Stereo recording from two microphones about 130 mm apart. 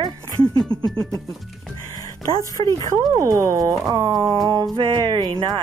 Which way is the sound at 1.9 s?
25° left (ahead or behind).